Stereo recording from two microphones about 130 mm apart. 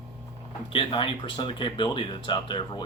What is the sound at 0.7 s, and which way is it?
Speech, 40° left (ahead or behind).